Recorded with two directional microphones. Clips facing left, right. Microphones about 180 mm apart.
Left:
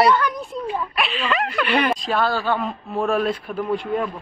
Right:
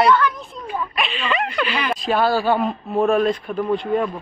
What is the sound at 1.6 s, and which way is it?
Speech, 60° left (ahead or behind).